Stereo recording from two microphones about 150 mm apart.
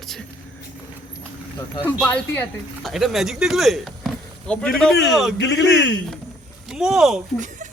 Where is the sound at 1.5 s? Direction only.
20° left (ahead or behind); by 5.3 s centre (ahead or behind).